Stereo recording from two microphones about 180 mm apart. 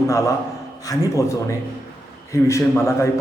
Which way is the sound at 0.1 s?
15° left (ahead or behind).